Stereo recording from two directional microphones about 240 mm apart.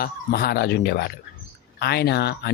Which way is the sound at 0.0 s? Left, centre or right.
Left.